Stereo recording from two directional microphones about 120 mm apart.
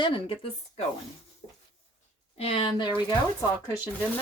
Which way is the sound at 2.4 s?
55° left (ahead or behind).